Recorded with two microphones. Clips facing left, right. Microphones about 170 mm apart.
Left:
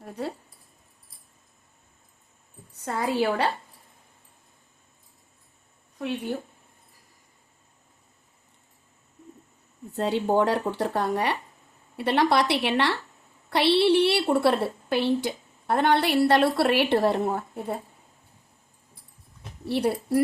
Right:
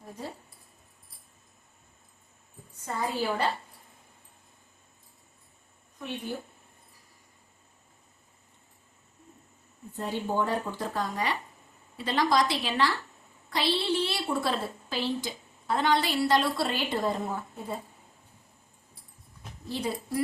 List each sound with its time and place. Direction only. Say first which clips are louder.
0.0 s keys jangling: left 7 dB; 70° left (ahead or behind)
2.8 s a woman's voice: left 5 dB; 70° left (ahead or behind)
9.9 s a woman's voice: left 7 dB; 80° left; by 17.7 s 65° left (ahead or behind)
19.6 s a woman's voice: left 7 dB; 65° left (ahead or behind)